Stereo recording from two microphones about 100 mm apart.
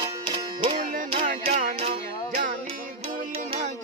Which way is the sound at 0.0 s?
55° right (ahead or behind).